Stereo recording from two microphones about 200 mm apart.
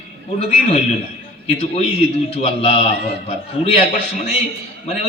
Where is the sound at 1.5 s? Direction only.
30° left (ahead or behind).